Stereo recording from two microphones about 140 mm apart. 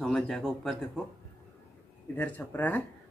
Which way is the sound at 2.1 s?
15° left (ahead or behind).